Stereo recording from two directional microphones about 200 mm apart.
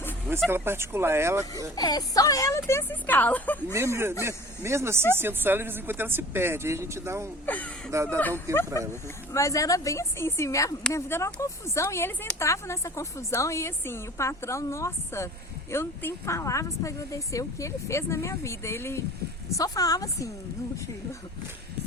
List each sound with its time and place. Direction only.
0.3 s speech: 10° right (ahead or behind)
1.7 s speech: 20° left (ahead or behind)
3.8 s speech: 15° right (ahead or behind)
7.4 s speech: 10° left (ahead or behind)
7.9 s speech: 15° right (ahead or behind)
9.3 s speech: 15° left (ahead or behind)